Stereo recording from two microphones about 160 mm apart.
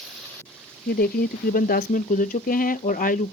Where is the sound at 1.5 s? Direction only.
60° left (ahead or behind).